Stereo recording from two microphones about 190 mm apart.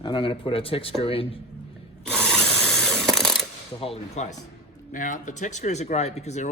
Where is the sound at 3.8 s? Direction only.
35° left (ahead or behind).